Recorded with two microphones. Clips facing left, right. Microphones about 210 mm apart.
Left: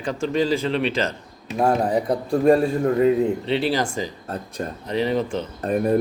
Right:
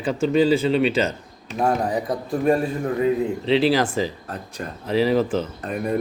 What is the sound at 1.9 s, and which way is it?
A man's voice, 30° left (ahead or behind).